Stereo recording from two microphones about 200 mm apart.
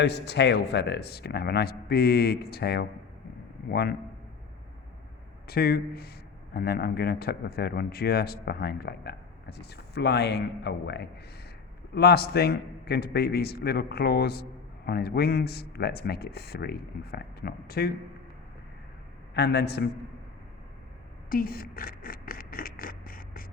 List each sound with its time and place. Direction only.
0.0 s speech: 60° left (ahead or behind)
5.5 s speech: 50° left (ahead or behind)
19.3 s a man's voice: 55° left (ahead or behind)
21.2 s a sound: 45° left (ahead or behind)